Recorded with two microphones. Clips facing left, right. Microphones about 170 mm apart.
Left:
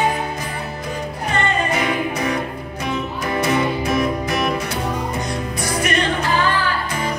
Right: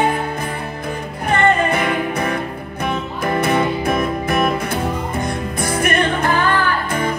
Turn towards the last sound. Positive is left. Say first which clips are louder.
# right 3 dB
turn(degrees=-55)  # may be behind; listen again after turning